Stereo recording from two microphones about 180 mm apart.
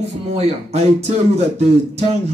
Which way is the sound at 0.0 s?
35° right (ahead or behind).